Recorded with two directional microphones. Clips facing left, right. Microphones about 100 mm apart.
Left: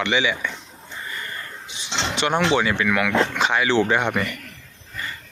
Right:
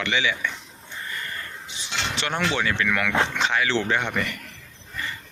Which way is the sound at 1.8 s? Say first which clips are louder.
Left 4 dB; 20° left (ahead or behind).